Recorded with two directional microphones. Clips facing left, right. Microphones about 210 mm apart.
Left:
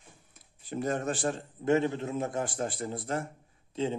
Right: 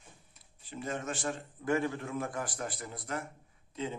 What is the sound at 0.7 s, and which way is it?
Speech, 40° left (ahead or behind).